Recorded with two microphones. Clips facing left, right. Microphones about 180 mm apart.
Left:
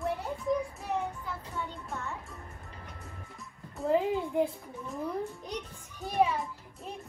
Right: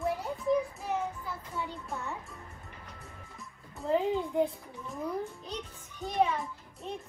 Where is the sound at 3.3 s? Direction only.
Centre (ahead or behind).